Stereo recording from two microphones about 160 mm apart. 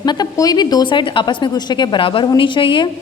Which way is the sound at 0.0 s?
25° left (ahead or behind).